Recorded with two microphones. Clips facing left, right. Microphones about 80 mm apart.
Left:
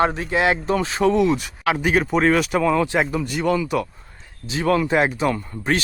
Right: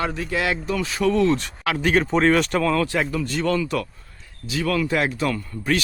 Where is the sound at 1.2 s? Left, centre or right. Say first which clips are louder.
Left 1 dB; centre.